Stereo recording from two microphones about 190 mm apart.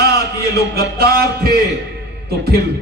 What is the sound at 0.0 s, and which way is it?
Music, 60° right (ahead or behind).